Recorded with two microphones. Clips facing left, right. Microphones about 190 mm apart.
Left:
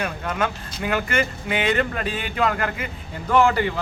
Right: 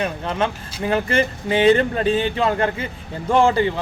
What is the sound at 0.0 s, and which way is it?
Speech, 25° right (ahead or behind).